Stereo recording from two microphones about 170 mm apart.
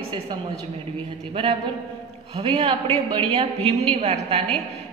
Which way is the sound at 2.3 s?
35° right (ahead or behind).